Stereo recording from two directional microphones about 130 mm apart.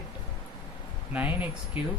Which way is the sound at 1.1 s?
10° right (ahead or behind).